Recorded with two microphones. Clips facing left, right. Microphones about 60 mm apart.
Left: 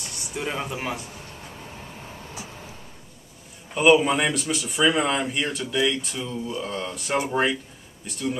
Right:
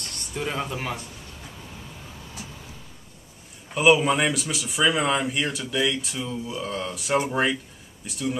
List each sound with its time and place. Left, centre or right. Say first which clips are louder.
0.3 s speech: even; centre
3.7 s speech: left 1 dB; centre